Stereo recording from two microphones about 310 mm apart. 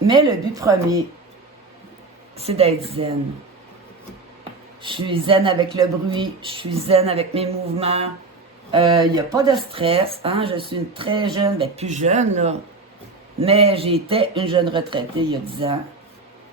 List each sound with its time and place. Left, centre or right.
0.1 s speech: centre
2.4 s speech: centre
4.8 s speech: centre
9.3 s speech: centre